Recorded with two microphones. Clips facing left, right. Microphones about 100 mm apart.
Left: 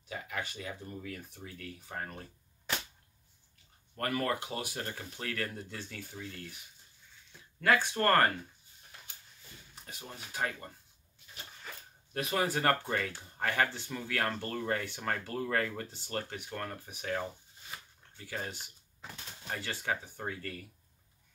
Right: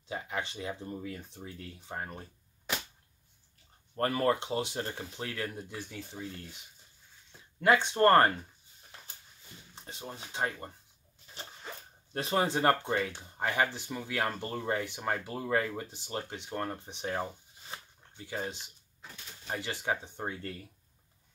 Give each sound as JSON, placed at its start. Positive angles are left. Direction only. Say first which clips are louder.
{"t": 0.1, "sound": "speech", "louder": "right 3 dB", "side_deg": -25}
{"t": 3.9, "sound": "speech", "louder": "right 5 dB", "side_deg": -30}
{"t": 7.6, "sound": "speech", "louder": "right 4 dB", "side_deg": -20}
{"t": 9.8, "sound": "speech", "louder": "right 4 dB", "side_deg": -25}